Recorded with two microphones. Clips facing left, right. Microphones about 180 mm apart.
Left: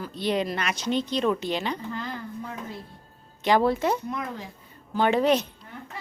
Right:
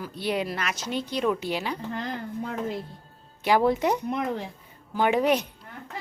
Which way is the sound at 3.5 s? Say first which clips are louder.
Even; 15° right (ahead or behind).